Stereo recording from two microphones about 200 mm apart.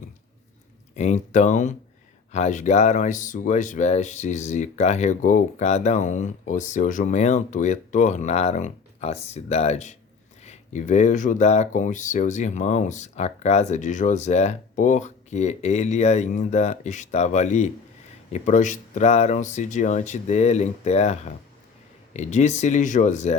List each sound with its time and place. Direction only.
0.9 s speech: 35° left (ahead or behind)